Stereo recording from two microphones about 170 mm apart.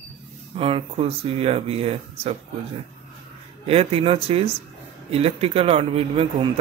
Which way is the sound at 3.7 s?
35° right (ahead or behind).